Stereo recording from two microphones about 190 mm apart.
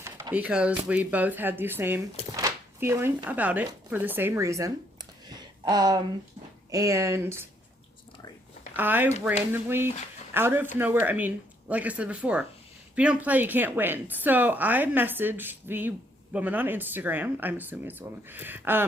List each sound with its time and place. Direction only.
0.0 s a woman's voice: 15° right (ahead or behind)
2.3 s a sound: 15° right (ahead or behind)
3.2 s a woman's voice: 10° right (ahead or behind)
8.7 s a woman's voice: 10° right (ahead or behind)